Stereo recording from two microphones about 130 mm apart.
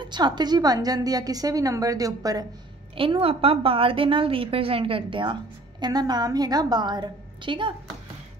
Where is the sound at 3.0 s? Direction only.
45° right (ahead or behind).